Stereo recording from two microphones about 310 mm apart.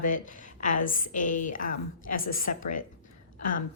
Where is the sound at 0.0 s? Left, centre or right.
Left.